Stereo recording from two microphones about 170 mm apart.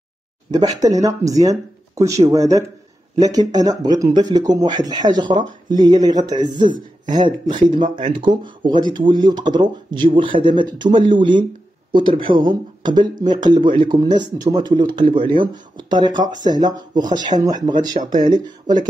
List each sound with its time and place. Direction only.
0.5 s speech: 20° right (ahead or behind)
7.5 s speech: 50° right (ahead or behind)
8.2 s speech: 25° right (ahead or behind)